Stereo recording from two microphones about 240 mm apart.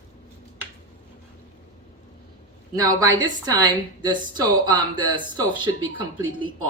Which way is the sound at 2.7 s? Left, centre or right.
Centre.